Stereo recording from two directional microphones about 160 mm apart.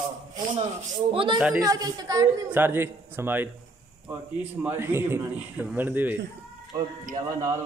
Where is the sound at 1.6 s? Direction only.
25° right (ahead or behind).